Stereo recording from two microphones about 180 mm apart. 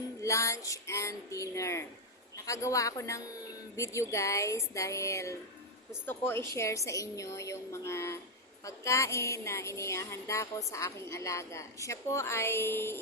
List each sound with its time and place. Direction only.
0.2 s a woman's voice: 15° left (ahead or behind)